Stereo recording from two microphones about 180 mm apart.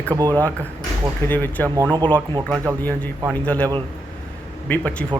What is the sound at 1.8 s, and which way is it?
Speech, 20° right (ahead or behind).